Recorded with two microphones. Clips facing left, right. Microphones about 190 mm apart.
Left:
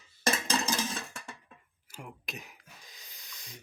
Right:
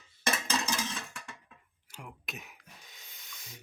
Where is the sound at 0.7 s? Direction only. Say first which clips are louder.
Left 2 dB; 40° left (ahead or behind).